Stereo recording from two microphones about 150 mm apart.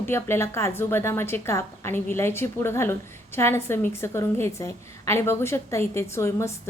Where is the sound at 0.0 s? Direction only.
15° left (ahead or behind).